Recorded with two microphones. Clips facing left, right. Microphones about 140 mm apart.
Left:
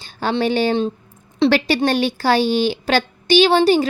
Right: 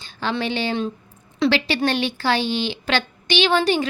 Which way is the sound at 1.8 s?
40° left (ahead or behind).